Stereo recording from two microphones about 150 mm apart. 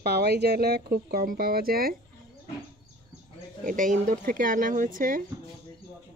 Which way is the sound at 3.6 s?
60° right (ahead or behind).